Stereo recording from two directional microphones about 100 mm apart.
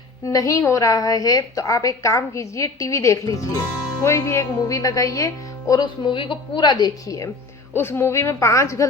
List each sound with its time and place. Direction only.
0.3 s a woman's voice: 35° left (ahead or behind)
5.8 s a woman's voice: 55° left (ahead or behind); by 7.3 s 35° left (ahead or behind)
7.8 s a woman's voice: 25° left (ahead or behind)